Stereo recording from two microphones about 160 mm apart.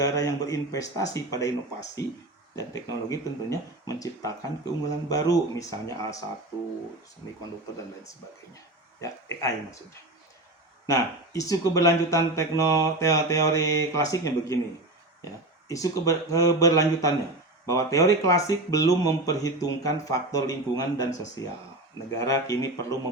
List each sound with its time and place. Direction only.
0.0 s speech: 20° left (ahead or behind)
9.0 s speech: 20° left (ahead or behind)
10.8 s speech: 20° left (ahead or behind)
15.7 s speech: 20° left (ahead or behind)